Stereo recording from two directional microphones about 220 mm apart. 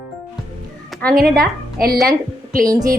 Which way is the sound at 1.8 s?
Centre (ahead or behind).